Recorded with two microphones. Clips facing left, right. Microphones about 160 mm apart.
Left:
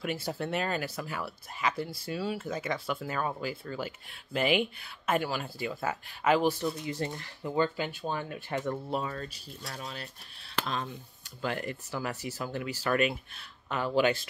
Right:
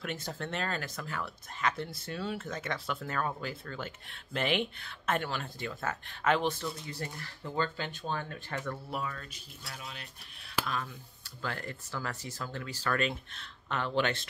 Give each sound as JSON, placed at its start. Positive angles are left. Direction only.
{"t": 0.0, "sound": "speech", "side_deg": 10}
{"t": 10.6, "sound": "speech", "side_deg": 25}